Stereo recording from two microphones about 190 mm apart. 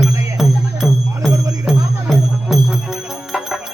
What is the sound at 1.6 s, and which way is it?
Music, centre (ahead or behind).